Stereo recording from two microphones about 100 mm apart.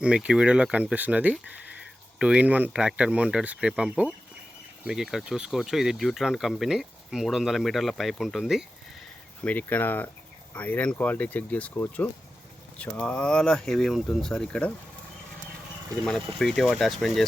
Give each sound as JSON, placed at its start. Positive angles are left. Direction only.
{"t": 0.0, "sound": "speech", "side_deg": -10}
{"t": 9.4, "sound": "speech", "side_deg": 15}
{"t": 16.0, "sound": "speech", "side_deg": 5}